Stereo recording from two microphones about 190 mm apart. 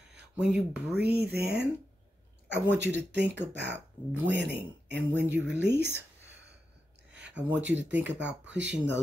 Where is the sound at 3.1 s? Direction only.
65° right (ahead or behind).